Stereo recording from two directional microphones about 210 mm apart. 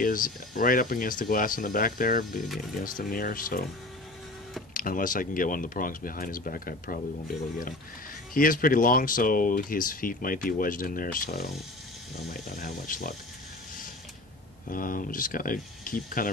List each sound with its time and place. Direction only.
0.0 s speech: 40° left (ahead or behind)
4.7 s speech: 40° left (ahead or behind)
12.5 s speech: 40° left (ahead or behind)
14.7 s speech: 40° left (ahead or behind)